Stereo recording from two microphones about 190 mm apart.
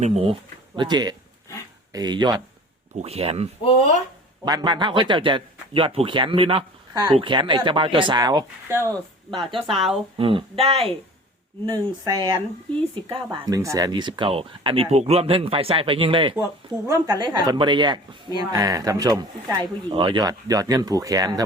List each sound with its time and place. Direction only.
0.0 s a woman's voice: 30° right (ahead or behind)
3.0 s speech: 35° right (ahead or behind)
4.4 s a woman's voice: 20° right (ahead or behind)
9.3 s a woman's voice: 30° right (ahead or behind)
9.6 s speech: centre (ahead or behind)
10.2 s a woman's voice: 30° right (ahead or behind)
11.6 s a woman's voice: 20° right (ahead or behind)
12.7 s speech: 5° left (ahead or behind)
13.3 s a woman's voice: 20° right (ahead or behind)